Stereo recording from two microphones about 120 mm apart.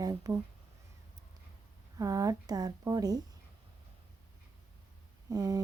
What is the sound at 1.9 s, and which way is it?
A woman's voice, 30° right (ahead or behind).